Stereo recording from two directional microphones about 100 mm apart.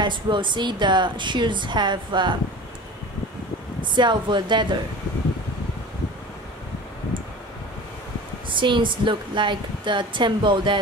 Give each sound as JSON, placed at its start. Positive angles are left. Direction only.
{"t": 0.0, "sound": "a woman's voice", "side_deg": -50}
{"t": 3.8, "sound": "a woman's voice", "side_deg": -50}
{"t": 7.1, "sound": "a sound", "side_deg": -55}
{"t": 8.5, "sound": "a woman's voice", "side_deg": -55}